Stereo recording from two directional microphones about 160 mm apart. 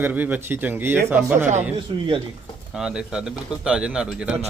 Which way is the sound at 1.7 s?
35° right (ahead or behind).